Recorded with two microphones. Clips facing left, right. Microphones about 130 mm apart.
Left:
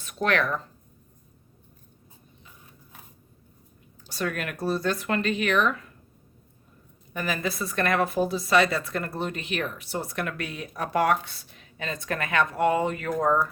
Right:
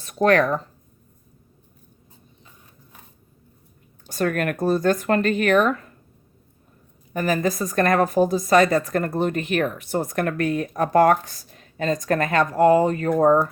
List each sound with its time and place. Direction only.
0.0 s speech: 40° right (ahead or behind)
4.0 s speech: 50° right (ahead or behind)
7.1 s speech: 40° right (ahead or behind)